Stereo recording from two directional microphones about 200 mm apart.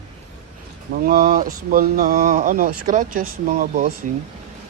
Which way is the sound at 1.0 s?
45° right (ahead or behind).